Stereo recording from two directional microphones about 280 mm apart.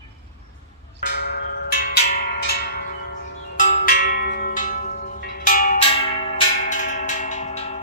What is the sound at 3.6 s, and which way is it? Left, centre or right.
Music, left.